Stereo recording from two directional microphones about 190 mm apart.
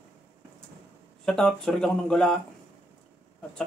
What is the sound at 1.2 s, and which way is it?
Speech, 5° left (ahead or behind).